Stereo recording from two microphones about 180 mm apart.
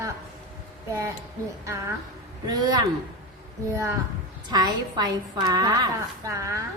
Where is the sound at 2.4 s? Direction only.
25° right (ahead or behind).